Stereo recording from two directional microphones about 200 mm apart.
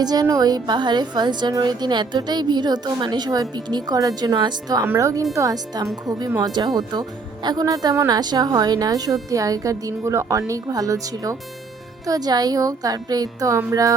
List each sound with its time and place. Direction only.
0.0 s a woman's voice: 20° right (ahead or behind)